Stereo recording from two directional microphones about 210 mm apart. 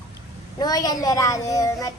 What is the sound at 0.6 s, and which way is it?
A child's voice, 20° left (ahead or behind).